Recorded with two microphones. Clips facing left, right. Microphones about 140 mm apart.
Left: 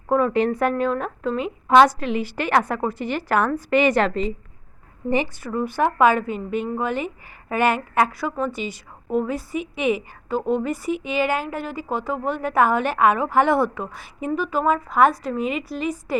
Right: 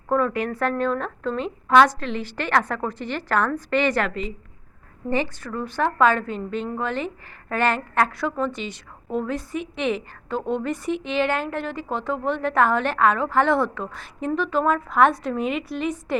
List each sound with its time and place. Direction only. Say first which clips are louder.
0.3 s speech: left 6 dB; 25° left (ahead or behind)
0.5 s a woman's voice: left 2 dB; 10° left (ahead or behind)
4.0 s a woman's voice: left 5 dB; 35° left (ahead or behind)
5.0 s a woman's voice: left 2 dB; 15° left (ahead or behind)